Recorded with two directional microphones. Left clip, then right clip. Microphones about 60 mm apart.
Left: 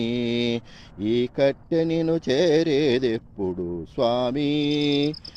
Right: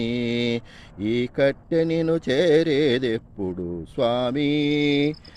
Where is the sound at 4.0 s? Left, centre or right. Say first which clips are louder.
Even; right.